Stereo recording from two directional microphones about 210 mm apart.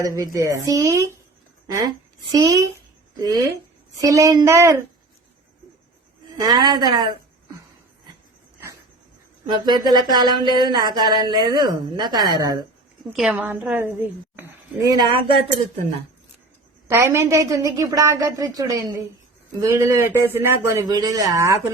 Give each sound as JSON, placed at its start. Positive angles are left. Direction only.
{"t": 0.0, "sound": "a woman's voice", "side_deg": -15}
{"t": 2.3, "sound": "a woman's voice", "side_deg": -15}
{"t": 6.4, "sound": "speech", "side_deg": -20}
{"t": 9.6, "sound": "speech", "side_deg": -20}
{"t": 13.1, "sound": "a woman's voice", "side_deg": -5}
{"t": 16.9, "sound": "a woman's voice", "side_deg": -10}